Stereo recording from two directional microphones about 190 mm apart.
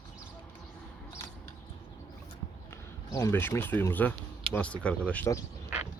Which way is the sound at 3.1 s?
15° left (ahead or behind).